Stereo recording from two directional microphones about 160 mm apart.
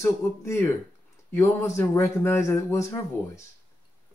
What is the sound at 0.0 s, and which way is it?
A man's voice, 15° left (ahead or behind).